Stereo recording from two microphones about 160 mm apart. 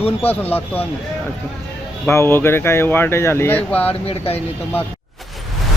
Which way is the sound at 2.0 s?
15° left (ahead or behind).